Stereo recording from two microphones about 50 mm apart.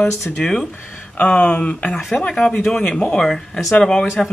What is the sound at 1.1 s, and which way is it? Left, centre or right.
Speech, left.